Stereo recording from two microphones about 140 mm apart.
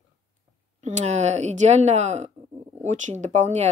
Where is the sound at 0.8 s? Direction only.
55° right (ahead or behind).